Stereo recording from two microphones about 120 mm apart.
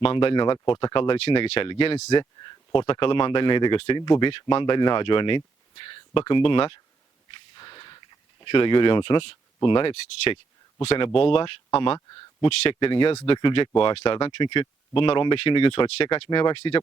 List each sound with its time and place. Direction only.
0.0 s speech: 50° left (ahead or behind)
2.1 s speech: 40° left (ahead or behind)